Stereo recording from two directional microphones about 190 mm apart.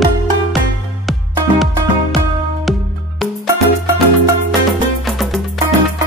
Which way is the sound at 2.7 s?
Centre (ahead or behind).